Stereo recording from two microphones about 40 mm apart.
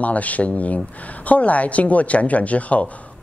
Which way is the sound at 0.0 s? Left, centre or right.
Left.